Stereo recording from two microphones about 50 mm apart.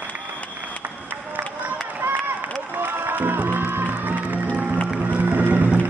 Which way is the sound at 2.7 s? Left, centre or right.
Right.